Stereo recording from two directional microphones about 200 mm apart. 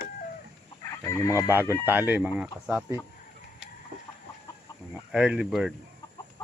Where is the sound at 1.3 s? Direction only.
10° right (ahead or behind).